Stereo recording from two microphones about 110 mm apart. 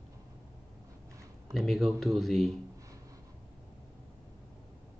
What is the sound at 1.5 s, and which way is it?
Speech, centre (ahead or behind).